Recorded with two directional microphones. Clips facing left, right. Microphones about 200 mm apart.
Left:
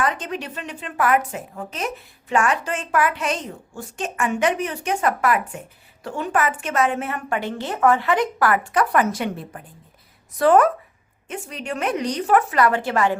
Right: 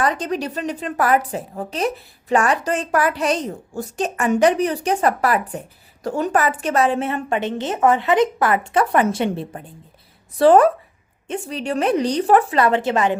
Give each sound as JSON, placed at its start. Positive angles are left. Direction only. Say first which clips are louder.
{"t": 0.0, "sound": "a woman's voice", "louder": "right 4 dB", "side_deg": -35}